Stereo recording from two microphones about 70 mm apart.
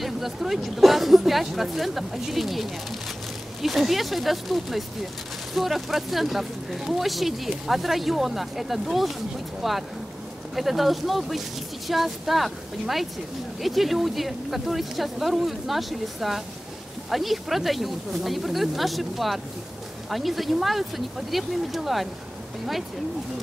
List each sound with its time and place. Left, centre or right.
0.0 s speech: centre